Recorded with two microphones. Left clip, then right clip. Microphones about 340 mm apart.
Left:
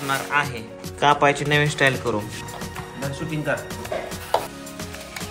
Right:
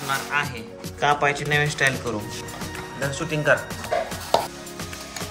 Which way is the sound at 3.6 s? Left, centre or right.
Centre.